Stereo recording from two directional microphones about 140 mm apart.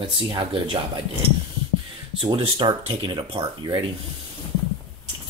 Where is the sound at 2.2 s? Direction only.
40° right (ahead or behind).